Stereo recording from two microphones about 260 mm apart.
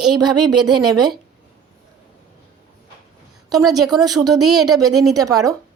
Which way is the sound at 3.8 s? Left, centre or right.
Centre.